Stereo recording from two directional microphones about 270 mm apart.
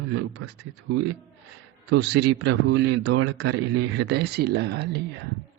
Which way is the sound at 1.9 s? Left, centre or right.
Right.